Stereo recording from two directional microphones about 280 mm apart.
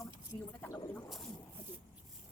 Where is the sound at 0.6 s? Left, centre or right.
Centre.